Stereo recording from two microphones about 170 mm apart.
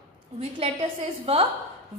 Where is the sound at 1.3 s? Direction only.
35° right (ahead or behind).